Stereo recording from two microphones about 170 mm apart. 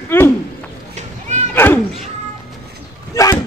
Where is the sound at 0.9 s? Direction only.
45° right (ahead or behind).